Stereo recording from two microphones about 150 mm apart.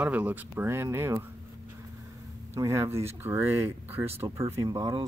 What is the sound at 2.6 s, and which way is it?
Speech, 20° right (ahead or behind).